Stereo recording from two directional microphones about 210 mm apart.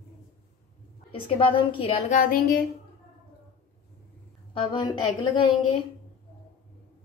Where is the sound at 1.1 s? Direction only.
25° left (ahead or behind); by 2.6 s 45° left (ahead or behind).